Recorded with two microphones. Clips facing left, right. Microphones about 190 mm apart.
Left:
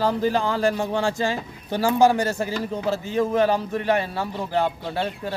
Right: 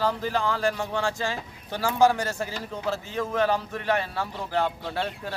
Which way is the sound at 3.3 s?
10° left (ahead or behind).